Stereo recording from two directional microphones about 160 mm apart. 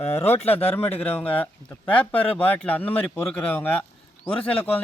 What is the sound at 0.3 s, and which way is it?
Speech, 40° left (ahead or behind).